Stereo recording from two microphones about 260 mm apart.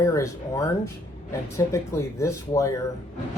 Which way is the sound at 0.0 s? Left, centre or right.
Centre.